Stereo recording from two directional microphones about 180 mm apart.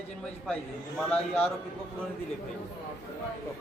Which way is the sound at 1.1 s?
5° left (ahead or behind).